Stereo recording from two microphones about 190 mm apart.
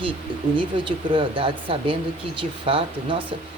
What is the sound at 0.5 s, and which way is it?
Speech, 25° right (ahead or behind).